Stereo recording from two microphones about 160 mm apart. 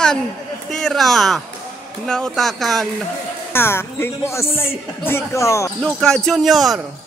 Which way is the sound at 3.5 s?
15° left (ahead or behind).